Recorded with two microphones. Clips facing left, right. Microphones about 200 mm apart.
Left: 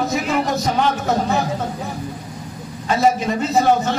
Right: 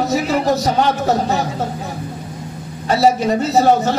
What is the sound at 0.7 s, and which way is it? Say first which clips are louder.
Speech: right 3 dB; 40° right (ahead or behind).